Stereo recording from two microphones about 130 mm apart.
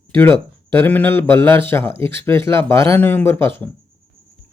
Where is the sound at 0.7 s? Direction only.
15° left (ahead or behind).